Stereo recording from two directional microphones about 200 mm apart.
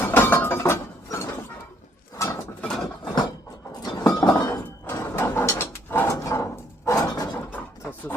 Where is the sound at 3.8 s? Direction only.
20° left (ahead or behind).